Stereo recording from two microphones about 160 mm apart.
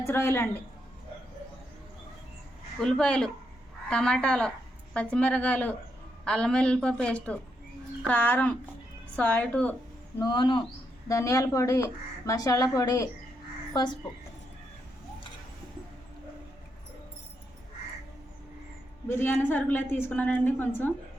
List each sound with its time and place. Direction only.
0.0 s a woman's voice: 15° left (ahead or behind)
2.8 s a woman's voice: 5° left (ahead or behind)
10.2 s speech: 25° left (ahead or behind)
19.0 s a woman's voice: 15° left (ahead or behind)